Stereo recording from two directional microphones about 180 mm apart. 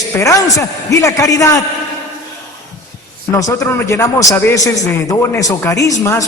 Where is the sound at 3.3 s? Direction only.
15° left (ahead or behind).